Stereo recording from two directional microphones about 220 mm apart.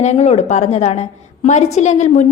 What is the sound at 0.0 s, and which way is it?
A woman's voice, 30° left (ahead or behind).